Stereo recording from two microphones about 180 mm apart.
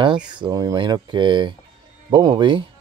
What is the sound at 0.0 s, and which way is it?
Speech, 25° right (ahead or behind).